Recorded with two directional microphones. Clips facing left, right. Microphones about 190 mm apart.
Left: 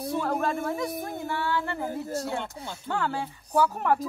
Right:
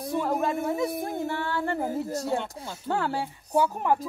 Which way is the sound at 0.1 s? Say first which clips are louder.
Right 2 dB; 10° right (ahead or behind).